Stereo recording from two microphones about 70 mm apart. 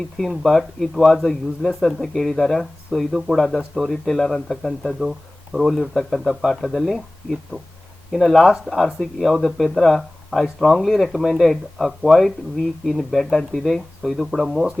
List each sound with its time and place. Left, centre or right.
0.2 s speech: centre
4.9 s speech: centre